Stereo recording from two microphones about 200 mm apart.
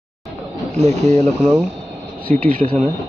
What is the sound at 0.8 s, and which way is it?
Speech, 35° right (ahead or behind).